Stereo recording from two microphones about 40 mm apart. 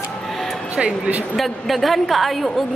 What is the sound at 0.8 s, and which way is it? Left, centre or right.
Speech, centre.